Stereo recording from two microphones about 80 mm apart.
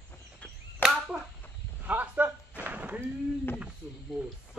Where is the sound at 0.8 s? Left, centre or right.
Centre.